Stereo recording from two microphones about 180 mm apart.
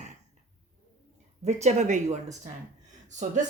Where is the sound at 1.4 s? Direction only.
40° right (ahead or behind).